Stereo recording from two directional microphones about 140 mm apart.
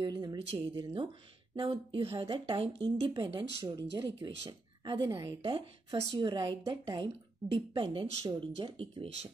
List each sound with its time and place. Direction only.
0.0 s speech: 30° right (ahead or behind)
5.4 s speech: 40° right (ahead or behind)